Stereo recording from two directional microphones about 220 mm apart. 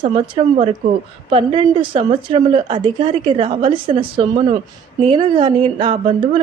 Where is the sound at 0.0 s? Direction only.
25° right (ahead or behind).